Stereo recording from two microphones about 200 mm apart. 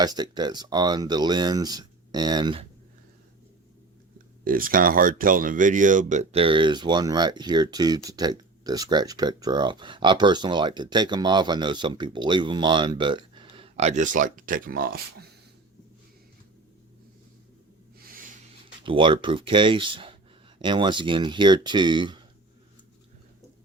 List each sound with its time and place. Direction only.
0.0 s speech: 20° right (ahead or behind)
4.4 s speech: 45° right (ahead or behind)
18.0 s a sound: 45° right (ahead or behind)
18.8 s speech: 25° right (ahead or behind)